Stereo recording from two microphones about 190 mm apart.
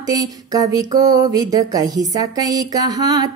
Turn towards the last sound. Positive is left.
turn(degrees=-20)  # may be behind; listen again after turning